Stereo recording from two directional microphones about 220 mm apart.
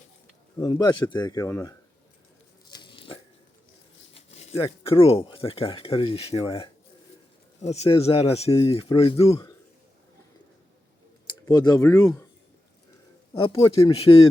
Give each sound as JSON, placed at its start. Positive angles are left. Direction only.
{"t": 0.6, "sound": "speech", "side_deg": 15}
{"t": 2.6, "sound": "crunch", "side_deg": 20}
{"t": 4.1, "sound": "a sound", "side_deg": 30}
{"t": 4.9, "sound": "speech", "side_deg": 25}
{"t": 11.3, "sound": "speech", "side_deg": 20}
{"t": 13.4, "sound": "speech", "side_deg": 25}